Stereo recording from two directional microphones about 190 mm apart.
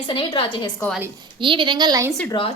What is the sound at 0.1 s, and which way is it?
Speech, 25° left (ahead or behind).